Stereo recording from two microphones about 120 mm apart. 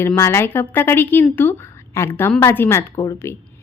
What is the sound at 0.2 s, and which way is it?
A woman's voice, 25° left (ahead or behind).